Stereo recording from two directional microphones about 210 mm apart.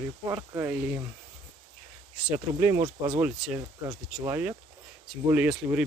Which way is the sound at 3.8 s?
15° right (ahead or behind).